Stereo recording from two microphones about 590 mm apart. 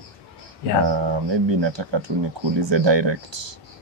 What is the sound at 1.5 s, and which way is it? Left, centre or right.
Speech, right.